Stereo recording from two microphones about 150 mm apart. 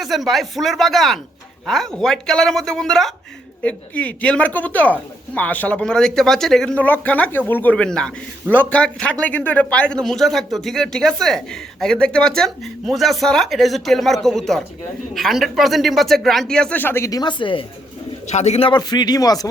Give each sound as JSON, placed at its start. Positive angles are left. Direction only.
{"t": 0.0, "sound": "a woman's voice", "side_deg": 0}
{"t": 18.3, "sound": "speech", "side_deg": 50}
{"t": 18.7, "sound": "speech", "side_deg": 25}